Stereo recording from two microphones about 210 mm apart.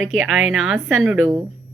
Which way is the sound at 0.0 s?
Centre (ahead or behind).